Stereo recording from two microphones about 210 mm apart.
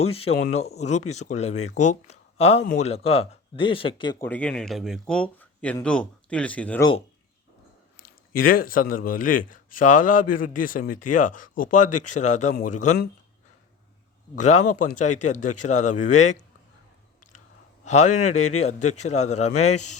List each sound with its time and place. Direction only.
0.0 s a man's voice: 30° left (ahead or behind)
4.2 s speech: 5° left (ahead or behind)
7.9 s a sound: 45° left (ahead or behind)
9.0 s a man's voice: 40° left (ahead or behind)
14.3 s a man's voice: 35° left (ahead or behind)
17.8 s a man's voice: 35° left (ahead or behind)